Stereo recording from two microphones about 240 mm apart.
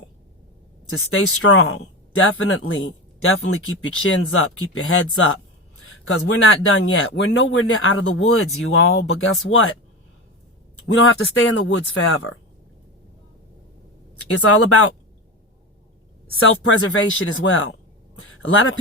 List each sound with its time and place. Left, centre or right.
0.9 s speech: left
10.9 s speech: left
14.4 s speech: left
16.4 s a man's voice: left